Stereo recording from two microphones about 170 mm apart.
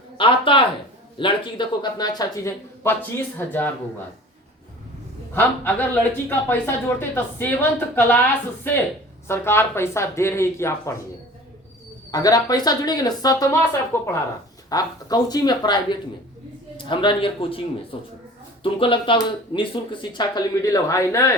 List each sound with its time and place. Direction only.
0.2 s speech: 30° left (ahead or behind); by 3.7 s 10° left (ahead or behind)
5.3 s speech: 10° left (ahead or behind)
12.1 s a man's voice: 20° left (ahead or behind)
18.6 s speech: 30° left (ahead or behind)